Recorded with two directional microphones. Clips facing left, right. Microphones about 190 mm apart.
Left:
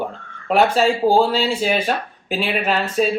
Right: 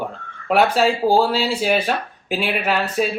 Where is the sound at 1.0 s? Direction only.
20° left (ahead or behind).